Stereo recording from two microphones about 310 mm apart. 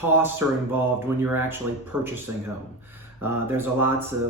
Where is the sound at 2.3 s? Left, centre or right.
Right.